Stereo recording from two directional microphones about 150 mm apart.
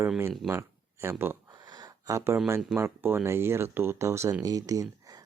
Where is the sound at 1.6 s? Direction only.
25° right (ahead or behind).